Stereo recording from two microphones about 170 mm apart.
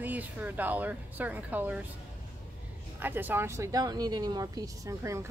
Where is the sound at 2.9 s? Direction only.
10° right (ahead or behind).